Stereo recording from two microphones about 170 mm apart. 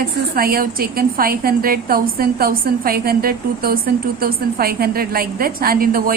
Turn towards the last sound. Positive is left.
turn(degrees=-60)  # may be behind; listen again after turning